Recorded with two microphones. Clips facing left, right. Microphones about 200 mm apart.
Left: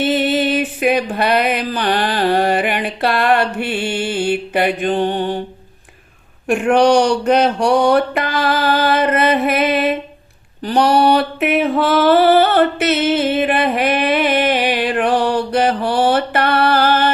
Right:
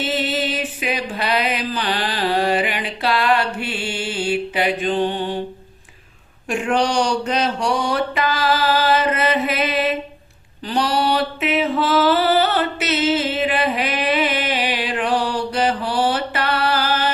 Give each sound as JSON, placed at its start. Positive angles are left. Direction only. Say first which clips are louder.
{"t": 0.0, "sound": "music", "louder": "left 6 dB", "side_deg": 55}
{"t": 6.5, "sound": "a sound", "louder": "left 7 dB", "side_deg": 60}
{"t": 10.6, "sound": "mantra", "louder": "left 7 dB", "side_deg": 55}